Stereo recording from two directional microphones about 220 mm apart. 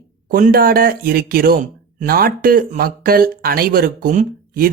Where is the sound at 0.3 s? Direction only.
40° right (ahead or behind).